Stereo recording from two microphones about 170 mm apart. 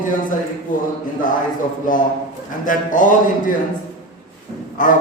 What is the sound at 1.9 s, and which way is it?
A man's voice, 50° left (ahead or behind).